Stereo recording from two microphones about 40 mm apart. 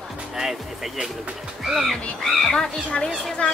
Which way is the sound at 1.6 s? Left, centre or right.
Centre.